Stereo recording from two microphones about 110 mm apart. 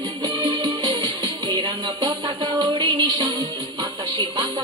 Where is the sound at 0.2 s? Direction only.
35° right (ahead or behind).